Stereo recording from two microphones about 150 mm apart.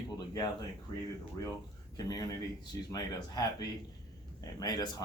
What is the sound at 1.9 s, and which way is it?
Speech, 25° left (ahead or behind).